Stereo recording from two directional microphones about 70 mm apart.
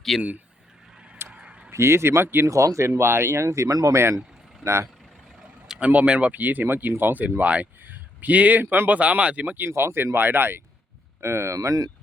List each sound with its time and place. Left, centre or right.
0.1 s speech: centre
1.3 s a sound: centre
1.7 s speech: right
2.5 s speech: right
5.6 s vehicle: centre
5.9 s speech: right
9.6 s speech: right
11.2 s speech: right